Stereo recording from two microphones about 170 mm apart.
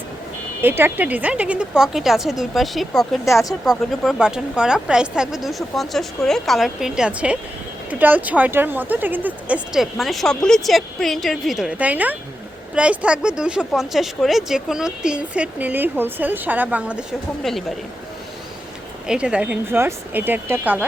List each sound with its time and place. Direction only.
0.6 s speech: 10° right (ahead or behind)
3.2 s speech: 15° left (ahead or behind)
4.0 s speech: centre (ahead or behind)
19.0 s speech: 5° right (ahead or behind)